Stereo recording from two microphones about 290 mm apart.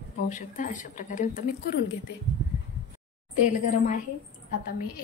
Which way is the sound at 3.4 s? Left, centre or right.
Left.